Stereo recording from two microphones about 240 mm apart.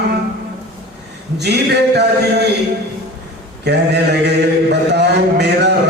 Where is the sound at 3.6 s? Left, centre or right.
Right.